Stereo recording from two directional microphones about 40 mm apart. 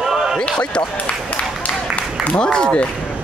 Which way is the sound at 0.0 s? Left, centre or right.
Centre.